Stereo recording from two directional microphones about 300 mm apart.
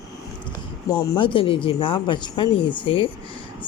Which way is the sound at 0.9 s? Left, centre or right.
Centre.